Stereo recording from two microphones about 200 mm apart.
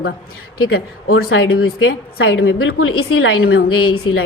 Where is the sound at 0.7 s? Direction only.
90° left.